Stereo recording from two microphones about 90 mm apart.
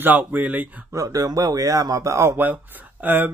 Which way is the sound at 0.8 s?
35° right (ahead or behind).